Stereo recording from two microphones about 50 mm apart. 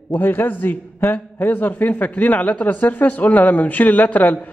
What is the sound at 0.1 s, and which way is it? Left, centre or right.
Speech, left.